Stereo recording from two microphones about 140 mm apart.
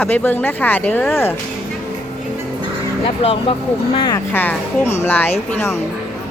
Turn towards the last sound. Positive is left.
turn(degrees=15)  # may be behind; listen again after turning